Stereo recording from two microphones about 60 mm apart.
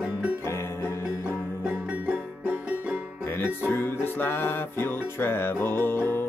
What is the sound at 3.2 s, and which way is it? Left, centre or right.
Music, left.